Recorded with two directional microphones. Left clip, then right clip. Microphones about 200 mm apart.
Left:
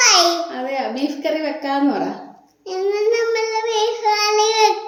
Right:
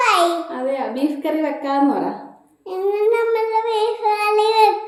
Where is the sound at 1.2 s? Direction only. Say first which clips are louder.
Even; 5° left (ahead or behind).